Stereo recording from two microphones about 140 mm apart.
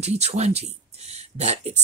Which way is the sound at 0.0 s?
50° right (ahead or behind).